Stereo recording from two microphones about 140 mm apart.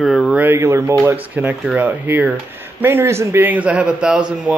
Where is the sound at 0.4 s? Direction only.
20° right (ahead or behind).